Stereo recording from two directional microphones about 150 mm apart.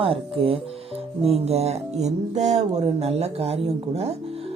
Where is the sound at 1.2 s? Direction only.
45° right (ahead or behind).